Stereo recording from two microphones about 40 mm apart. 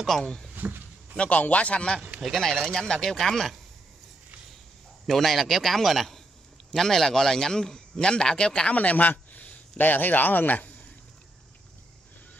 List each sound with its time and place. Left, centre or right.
0.1 s a man's voice: centre
0.6 s speech: right
1.1 s a man's voice: left
2.3 s a man's voice: centre
5.0 s a man's voice: centre; by 8.7 s left
8.7 s a sound: left
9.8 s speech: left